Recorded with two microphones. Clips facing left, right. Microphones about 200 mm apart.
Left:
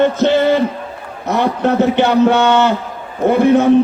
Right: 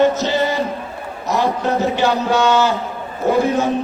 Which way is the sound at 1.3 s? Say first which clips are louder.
Left 3 dB; 60° left (ahead or behind).